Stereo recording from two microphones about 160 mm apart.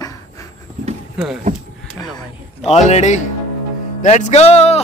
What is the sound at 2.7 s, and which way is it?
A man's voice, 45° left (ahead or behind).